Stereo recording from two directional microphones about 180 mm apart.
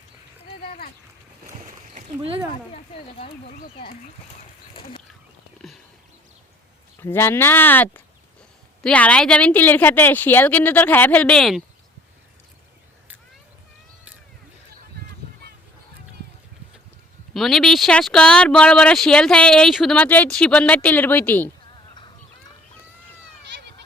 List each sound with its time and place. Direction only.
1.9 s a sound: 40° right (ahead or behind)
2.2 s speech: 30° right (ahead or behind)
2.7 s speech: 30° left (ahead or behind)
3.6 s speech: 55° left (ahead or behind)
4.7 s wild animals: 30° left (ahead or behind)
7.0 s a woman's voice: 10° left (ahead or behind)
16.2 s a sound: 65° right (ahead or behind)
17.3 s speech: centre (ahead or behind)
23.4 s run: 70° right (ahead or behind)